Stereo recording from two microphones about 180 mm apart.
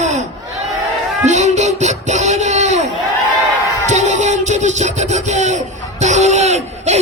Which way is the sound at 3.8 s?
40° right (ahead or behind).